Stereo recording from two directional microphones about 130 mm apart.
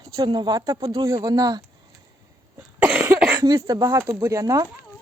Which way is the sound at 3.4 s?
30° right (ahead or behind).